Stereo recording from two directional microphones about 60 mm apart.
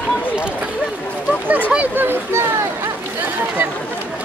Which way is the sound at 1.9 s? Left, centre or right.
Right.